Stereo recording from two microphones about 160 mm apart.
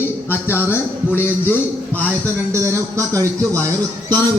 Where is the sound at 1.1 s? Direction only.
15° left (ahead or behind).